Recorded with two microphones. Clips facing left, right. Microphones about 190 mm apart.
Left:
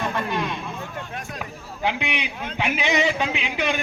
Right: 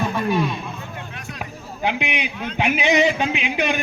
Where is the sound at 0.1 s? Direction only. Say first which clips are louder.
Right 5 dB; 10° right (ahead or behind).